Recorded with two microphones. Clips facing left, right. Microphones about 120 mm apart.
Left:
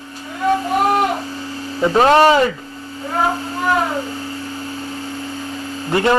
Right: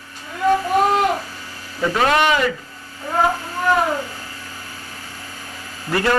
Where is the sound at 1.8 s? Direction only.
30° left (ahead or behind).